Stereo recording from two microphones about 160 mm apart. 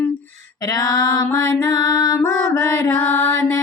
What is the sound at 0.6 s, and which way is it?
Music, 25° left (ahead or behind).